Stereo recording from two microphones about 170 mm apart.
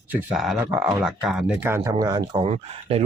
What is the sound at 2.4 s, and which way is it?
Speech, 35° right (ahead or behind).